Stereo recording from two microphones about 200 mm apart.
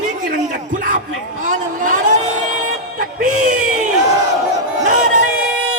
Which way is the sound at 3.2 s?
40° right (ahead or behind).